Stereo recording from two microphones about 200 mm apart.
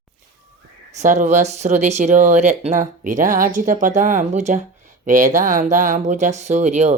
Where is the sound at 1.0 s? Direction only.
40° right (ahead or behind).